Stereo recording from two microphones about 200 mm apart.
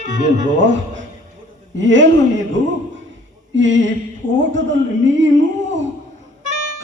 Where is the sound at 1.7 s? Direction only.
65° right (ahead or behind).